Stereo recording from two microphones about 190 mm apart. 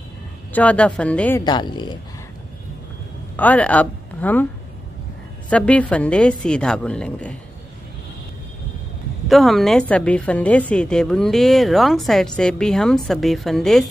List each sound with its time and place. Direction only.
0.5 s a woman's voice: 5° left (ahead or behind)
1.4 s speech: 25° left (ahead or behind)
3.3 s speech: 10° left (ahead or behind)
5.5 s a woman's voice: 5° left (ahead or behind)
9.3 s a woman's voice: centre (ahead or behind)